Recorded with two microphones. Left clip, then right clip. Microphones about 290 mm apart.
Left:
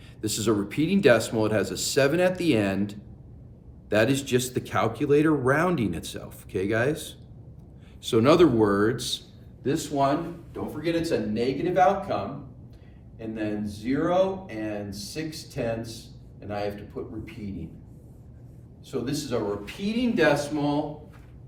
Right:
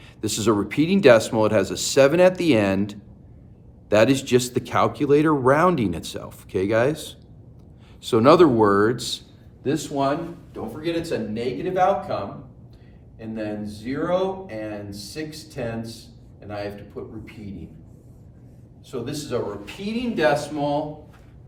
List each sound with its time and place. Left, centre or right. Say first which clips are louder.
0.2 s speech: right 4 dB; centre
10.5 s speech: right 1 dB; centre
18.9 s speech: right 1 dB; centre